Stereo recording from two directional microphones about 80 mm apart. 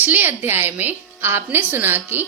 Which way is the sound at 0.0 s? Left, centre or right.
Right.